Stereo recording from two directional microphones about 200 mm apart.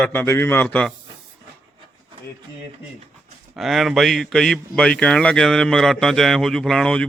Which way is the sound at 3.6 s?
Centre (ahead or behind).